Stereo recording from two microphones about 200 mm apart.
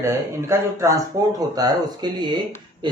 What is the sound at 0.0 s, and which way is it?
Speech, 15° right (ahead or behind).